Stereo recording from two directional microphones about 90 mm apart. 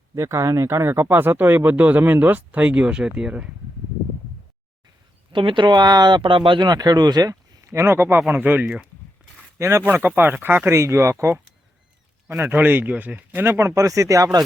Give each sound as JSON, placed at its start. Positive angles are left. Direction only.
{"t": 0.2, "sound": "speech", "side_deg": -35}
{"t": 5.3, "sound": "speech", "side_deg": -65}
{"t": 6.7, "sound": "speech", "side_deg": -50}
{"t": 9.6, "sound": "speech", "side_deg": -30}
{"t": 10.7, "sound": "speech", "side_deg": -30}